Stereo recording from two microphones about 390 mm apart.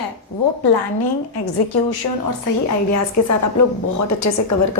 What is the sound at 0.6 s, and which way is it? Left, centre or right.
A woman's voice, left.